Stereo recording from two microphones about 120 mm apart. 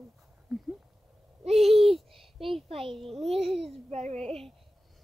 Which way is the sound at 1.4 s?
60° right (ahead or behind).